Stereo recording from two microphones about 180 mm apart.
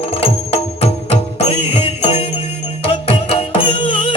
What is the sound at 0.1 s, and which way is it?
Music, 30° left (ahead or behind).